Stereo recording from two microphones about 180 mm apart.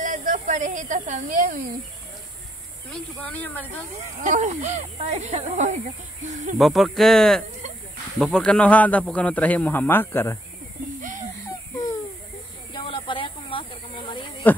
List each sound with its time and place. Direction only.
0.0 s a woman's voice: 45° right (ahead or behind)
3.2 s speech: 10° left (ahead or behind)
4.2 s speech: 45° right (ahead or behind)
6.6 s speech: centre (ahead or behind)
11.0 s a sound: 45° right (ahead or behind)
12.7 s snake: 30° left (ahead or behind)